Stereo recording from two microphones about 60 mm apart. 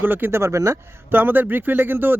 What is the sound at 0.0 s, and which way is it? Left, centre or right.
Speech, right.